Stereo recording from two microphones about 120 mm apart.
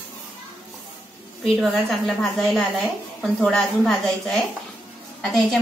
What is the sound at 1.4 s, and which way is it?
A woman's voice, 5° left (ahead or behind).